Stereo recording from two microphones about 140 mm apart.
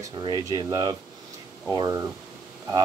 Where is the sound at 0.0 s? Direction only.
25° right (ahead or behind).